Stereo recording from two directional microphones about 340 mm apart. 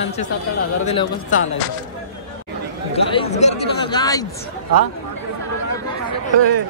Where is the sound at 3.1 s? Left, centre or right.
Centre.